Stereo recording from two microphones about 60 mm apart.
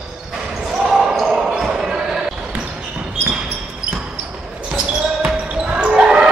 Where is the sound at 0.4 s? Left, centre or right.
Centre.